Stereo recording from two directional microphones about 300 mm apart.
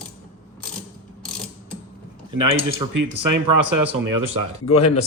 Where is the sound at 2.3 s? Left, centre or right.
Right.